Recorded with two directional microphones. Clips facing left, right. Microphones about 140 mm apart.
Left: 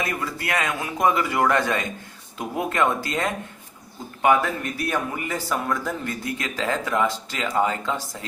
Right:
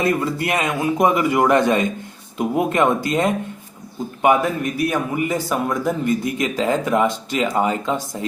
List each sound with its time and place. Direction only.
0.0 s a man's voice: 25° right (ahead or behind)